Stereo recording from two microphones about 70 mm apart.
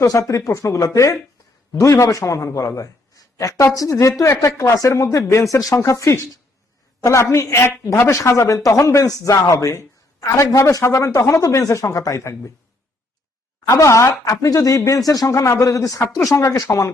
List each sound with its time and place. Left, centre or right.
0.0 s a man's voice: left
13.7 s speech: left